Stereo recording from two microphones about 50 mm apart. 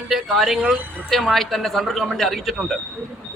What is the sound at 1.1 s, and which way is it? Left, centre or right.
A man's voice, centre.